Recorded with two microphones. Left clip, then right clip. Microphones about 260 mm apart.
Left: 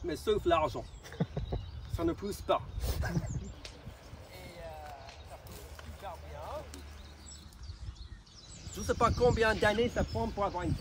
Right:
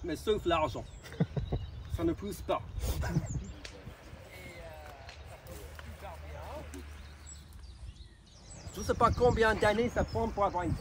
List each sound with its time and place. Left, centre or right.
0.0 s speech: centre
1.0 s a sound: right
2.0 s speech: centre
2.8 s speech: right
8.7 s speech: centre